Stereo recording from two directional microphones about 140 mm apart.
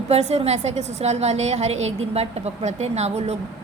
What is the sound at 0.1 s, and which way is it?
A woman's voice, 50° right (ahead or behind).